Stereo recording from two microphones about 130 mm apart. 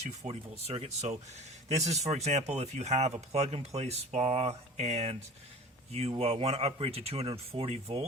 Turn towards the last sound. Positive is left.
turn(degrees=-50)  # may be behind; listen again after turning